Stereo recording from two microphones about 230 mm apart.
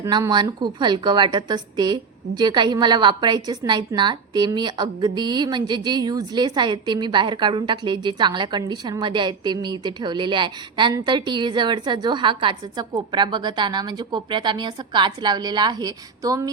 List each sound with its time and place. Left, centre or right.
0.0 s a woman's voice: centre